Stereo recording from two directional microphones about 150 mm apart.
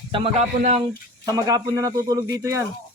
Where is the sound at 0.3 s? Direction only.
45° right (ahead or behind).